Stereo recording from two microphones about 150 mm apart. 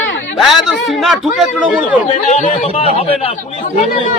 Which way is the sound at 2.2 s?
55° left (ahead or behind).